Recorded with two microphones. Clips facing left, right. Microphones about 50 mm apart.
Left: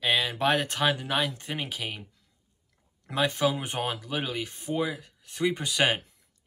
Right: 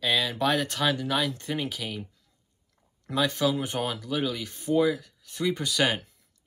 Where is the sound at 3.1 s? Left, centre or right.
Left.